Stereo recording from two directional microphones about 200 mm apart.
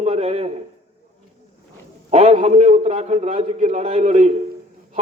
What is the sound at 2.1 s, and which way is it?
A man's voice, 30° right (ahead or behind).